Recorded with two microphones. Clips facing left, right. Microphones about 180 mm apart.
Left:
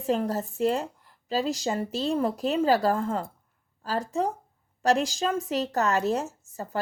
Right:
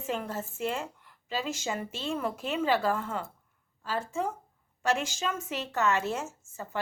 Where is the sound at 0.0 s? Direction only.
35° left (ahead or behind).